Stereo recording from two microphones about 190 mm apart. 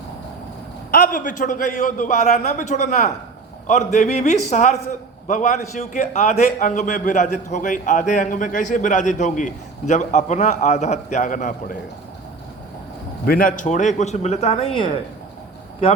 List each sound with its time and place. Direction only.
0.9 s a man's voice: 50° left (ahead or behind)
13.2 s a man's voice: 50° left (ahead or behind); by 14.7 s 30° left (ahead or behind)